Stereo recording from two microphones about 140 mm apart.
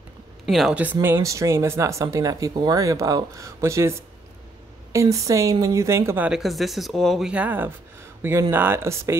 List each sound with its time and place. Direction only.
0.5 s speech: centre (ahead or behind)
1.0 s speech: 20° right (ahead or behind)
4.9 s a woman's voice: 25° right (ahead or behind)